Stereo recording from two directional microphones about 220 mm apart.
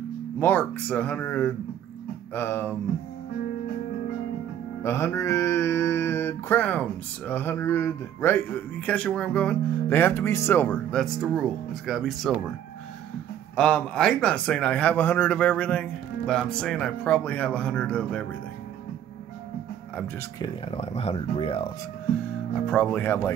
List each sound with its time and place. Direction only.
0.4 s mantra: 5° left (ahead or behind)
4.8 s mantra: 10° left (ahead or behind)
8.8 s a man's voice: 5° left (ahead or behind)
13.6 s a man's voice: 5° left (ahead or behind)
20.4 s speech: 25° left (ahead or behind)
22.5 s mantra: 5° left (ahead or behind)